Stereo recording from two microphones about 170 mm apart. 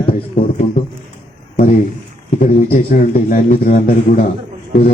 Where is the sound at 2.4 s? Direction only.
50° left (ahead or behind).